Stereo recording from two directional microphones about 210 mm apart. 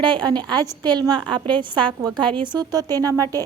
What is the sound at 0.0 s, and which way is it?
A woman's voice, 20° right (ahead or behind).